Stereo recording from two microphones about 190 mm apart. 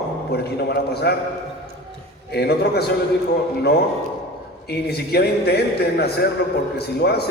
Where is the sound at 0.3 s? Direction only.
55° left (ahead or behind).